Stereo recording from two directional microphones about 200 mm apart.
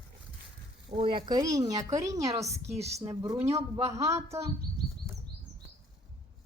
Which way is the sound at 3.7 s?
15° right (ahead or behind).